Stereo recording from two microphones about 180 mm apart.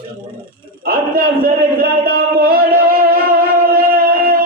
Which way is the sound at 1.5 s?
55° right (ahead or behind).